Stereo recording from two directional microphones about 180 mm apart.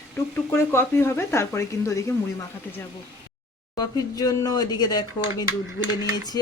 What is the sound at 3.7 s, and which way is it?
Speech, 20° left (ahead or behind).